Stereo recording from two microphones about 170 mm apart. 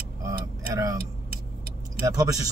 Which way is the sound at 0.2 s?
20° right (ahead or behind).